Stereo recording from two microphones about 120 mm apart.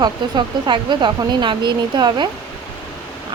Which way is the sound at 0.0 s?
40° right (ahead or behind).